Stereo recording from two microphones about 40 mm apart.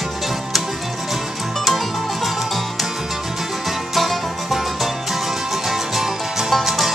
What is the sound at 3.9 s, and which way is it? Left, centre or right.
Music, centre.